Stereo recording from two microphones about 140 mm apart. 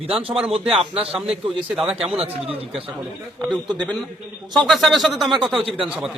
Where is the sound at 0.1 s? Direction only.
40° right (ahead or behind).